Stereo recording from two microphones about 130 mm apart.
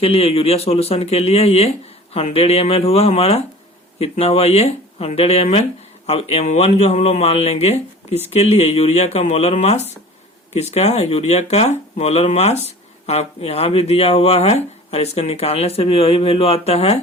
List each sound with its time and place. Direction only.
0.0 s speech: 45° left (ahead or behind)